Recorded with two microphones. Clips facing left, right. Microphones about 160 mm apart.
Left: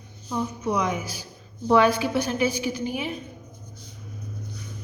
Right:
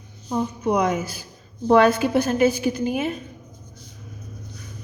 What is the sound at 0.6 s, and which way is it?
Speech, 55° right (ahead or behind).